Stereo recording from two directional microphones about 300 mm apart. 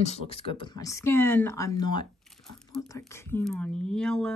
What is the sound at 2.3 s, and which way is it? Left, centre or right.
Speech, centre.